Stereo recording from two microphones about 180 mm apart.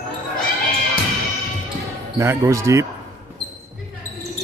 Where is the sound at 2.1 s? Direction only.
15° right (ahead or behind).